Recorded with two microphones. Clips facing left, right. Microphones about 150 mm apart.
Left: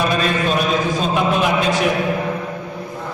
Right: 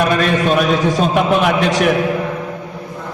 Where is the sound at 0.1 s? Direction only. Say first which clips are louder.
Right 4 dB; 65° right (ahead or behind).